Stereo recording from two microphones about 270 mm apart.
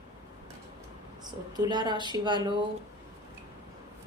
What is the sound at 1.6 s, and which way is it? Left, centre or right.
Speech, centre.